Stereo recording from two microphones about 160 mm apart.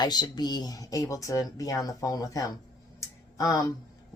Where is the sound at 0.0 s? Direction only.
25° left (ahead or behind).